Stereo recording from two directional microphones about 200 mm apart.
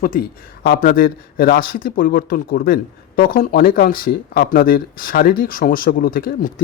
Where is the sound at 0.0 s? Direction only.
45° left (ahead or behind).